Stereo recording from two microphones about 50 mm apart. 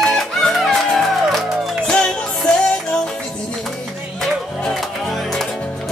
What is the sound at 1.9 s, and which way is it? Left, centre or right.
Music, left.